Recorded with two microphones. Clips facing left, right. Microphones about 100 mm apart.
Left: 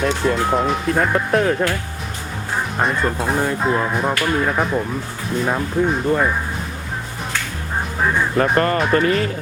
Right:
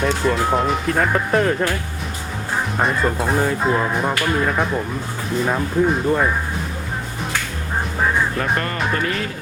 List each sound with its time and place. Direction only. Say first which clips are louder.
0.0 s speech: even; centre (ahead or behind)
2.7 s speech: even; centre (ahead or behind)
8.0 s music: even; centre (ahead or behind)
8.5 s speech: left 6 dB; 40° left (ahead or behind)